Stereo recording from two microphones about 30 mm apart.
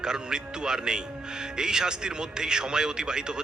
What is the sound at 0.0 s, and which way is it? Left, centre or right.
Speech, right.